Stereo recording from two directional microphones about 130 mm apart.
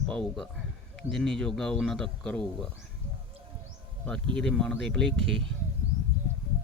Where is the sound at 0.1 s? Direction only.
5° left (ahead or behind).